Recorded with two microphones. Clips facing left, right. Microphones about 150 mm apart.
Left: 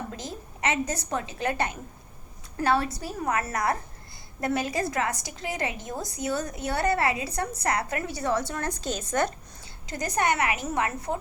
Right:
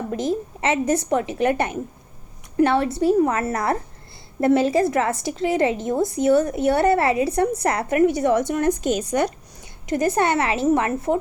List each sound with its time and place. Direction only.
0.1 s a woman's voice: 25° right (ahead or behind)